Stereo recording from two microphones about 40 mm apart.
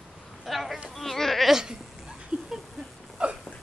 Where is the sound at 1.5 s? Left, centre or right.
Centre.